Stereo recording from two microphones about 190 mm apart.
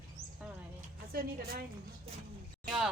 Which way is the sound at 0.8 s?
50° right (ahead or behind).